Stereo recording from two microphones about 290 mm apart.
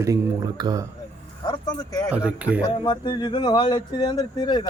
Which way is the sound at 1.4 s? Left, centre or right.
Centre.